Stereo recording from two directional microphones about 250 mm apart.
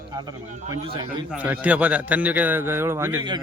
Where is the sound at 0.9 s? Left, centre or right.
Centre.